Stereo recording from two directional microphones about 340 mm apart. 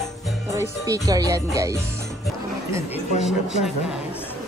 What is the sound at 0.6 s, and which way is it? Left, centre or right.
A woman's voice, centre.